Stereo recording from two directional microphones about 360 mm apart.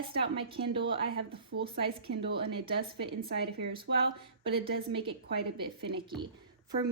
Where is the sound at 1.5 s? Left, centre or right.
Right.